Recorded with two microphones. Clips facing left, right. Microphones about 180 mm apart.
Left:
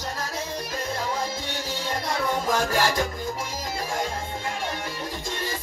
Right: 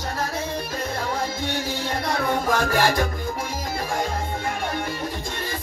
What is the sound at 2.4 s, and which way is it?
Music, 60° right (ahead or behind).